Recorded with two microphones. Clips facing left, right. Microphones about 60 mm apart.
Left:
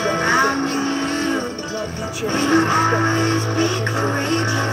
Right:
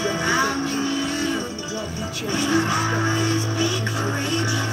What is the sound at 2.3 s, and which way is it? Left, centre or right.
Music, left.